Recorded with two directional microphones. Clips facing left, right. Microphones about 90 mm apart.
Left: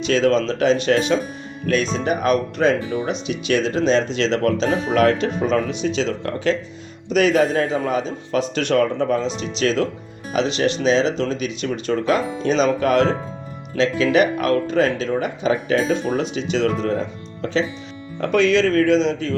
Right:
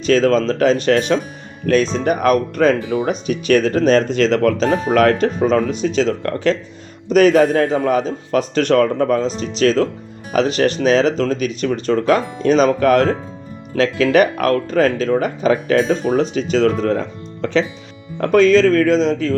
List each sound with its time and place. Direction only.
0.0 s speech: 40° right (ahead or behind)